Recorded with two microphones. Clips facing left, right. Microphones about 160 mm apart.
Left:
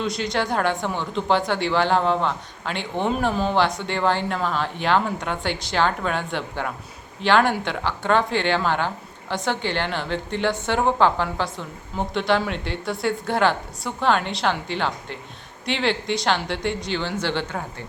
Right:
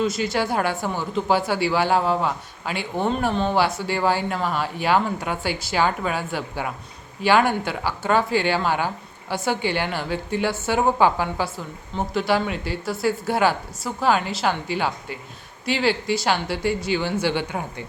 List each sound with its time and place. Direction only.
0.0 s a woman's voice: 5° right (ahead or behind)